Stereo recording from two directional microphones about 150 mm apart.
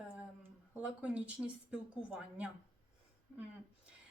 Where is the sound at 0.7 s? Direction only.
5° right (ahead or behind).